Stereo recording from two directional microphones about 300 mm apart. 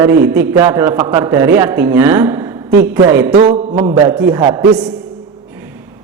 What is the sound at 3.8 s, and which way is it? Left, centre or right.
A woman's voice, centre.